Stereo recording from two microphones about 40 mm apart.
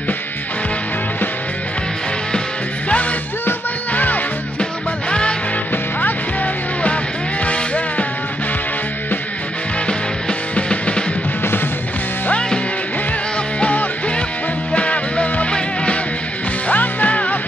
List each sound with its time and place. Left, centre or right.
2.9 s music: left
5.7 s music: left
9.8 s music: left
13.6 s music: left
16.6 s music: left